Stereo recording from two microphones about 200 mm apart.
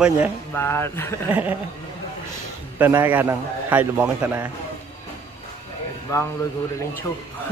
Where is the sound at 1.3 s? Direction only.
10° right (ahead or behind).